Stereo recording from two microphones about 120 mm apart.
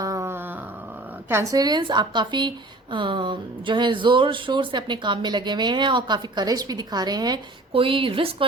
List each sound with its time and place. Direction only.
0.0 s a sound: 25° right (ahead or behind)
1.3 s speech: 25° right (ahead or behind)
7.7 s a woman's voice: 50° right (ahead or behind)